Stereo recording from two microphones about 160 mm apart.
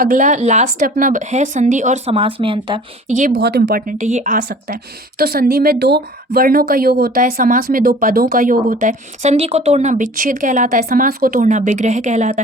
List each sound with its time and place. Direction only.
0.0 s speech: 55° right (ahead or behind)
2.1 s speech: 35° right (ahead or behind)
3.1 s speech: 50° right (ahead or behind)
3.3 s speech: 90° right; by 4.4 s 50° right (ahead or behind)
4.4 s speech: 70° right (ahead or behind); by 12.4 s 45° right (ahead or behind)